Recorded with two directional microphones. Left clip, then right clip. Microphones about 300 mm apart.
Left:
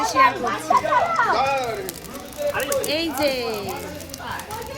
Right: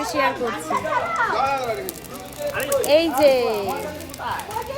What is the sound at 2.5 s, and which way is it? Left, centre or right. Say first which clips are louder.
Speech: right 3 dB; centre.